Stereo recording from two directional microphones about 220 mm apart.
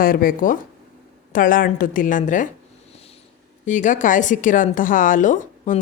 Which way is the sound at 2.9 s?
25° left (ahead or behind).